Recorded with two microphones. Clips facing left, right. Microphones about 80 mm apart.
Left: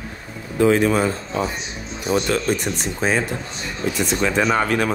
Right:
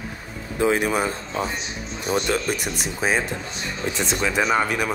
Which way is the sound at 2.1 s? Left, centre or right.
Centre.